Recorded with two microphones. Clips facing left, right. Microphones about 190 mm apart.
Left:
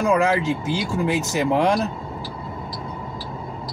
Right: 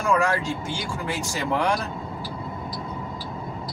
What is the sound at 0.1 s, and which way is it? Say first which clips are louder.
Speech: left 1 dB; 20° left (ahead or behind).